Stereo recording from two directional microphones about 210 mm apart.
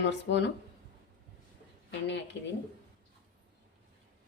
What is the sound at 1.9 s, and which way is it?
Speech, 60° left (ahead or behind).